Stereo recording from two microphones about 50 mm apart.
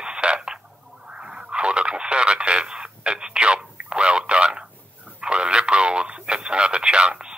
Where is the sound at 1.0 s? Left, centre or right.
Centre.